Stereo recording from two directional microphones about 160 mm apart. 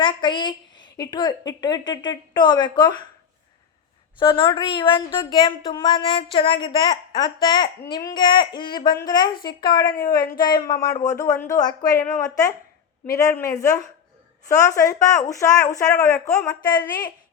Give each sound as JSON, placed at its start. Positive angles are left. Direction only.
{"t": 0.0, "sound": "a woman's voice", "side_deg": 30}
{"t": 4.2, "sound": "a woman's voice", "side_deg": 30}
{"t": 16.3, "sound": "speech", "side_deg": 5}